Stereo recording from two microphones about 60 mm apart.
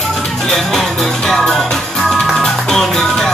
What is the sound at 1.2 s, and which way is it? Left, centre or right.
Music, centre.